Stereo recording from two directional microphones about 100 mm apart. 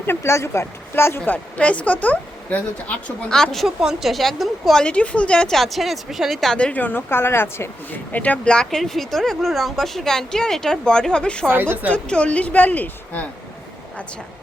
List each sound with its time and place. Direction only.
0.0 s speech: 25° left (ahead or behind)
8.1 s speech: 15° left (ahead or behind)
11.4 s a woman's voice: 20° right (ahead or behind)
11.9 s speech: 10° left (ahead or behind)